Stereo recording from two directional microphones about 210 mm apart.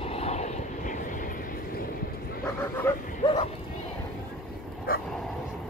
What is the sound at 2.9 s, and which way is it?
Speech, 10° left (ahead or behind).